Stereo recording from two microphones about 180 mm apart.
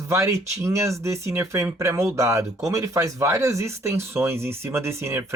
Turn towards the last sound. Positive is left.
turn(degrees=-15)  # may be behind; listen again after turning